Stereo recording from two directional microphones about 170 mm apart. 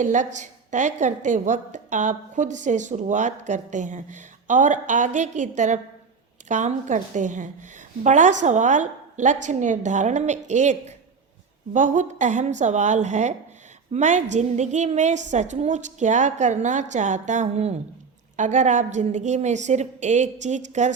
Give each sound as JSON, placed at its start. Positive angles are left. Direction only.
{"t": 0.0, "sound": "a woman's voice", "side_deg": -45}